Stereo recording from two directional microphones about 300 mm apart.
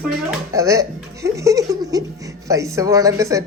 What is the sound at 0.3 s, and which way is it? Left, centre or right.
Speech, centre.